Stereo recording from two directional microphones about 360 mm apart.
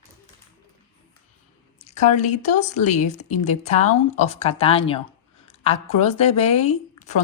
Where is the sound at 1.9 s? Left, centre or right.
Centre.